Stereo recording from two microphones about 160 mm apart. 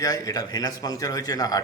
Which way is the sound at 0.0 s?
25° left (ahead or behind).